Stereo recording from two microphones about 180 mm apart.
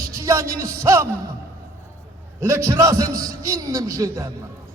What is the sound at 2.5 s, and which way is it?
A man's voice, 15° right (ahead or behind).